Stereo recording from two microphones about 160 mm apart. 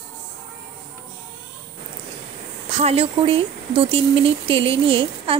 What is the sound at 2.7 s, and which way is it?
Speech, 40° right (ahead or behind).